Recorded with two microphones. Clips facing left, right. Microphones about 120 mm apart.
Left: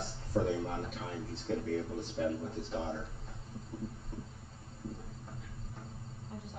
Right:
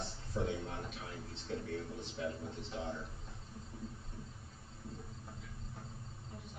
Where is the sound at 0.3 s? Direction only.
45° left (ahead or behind).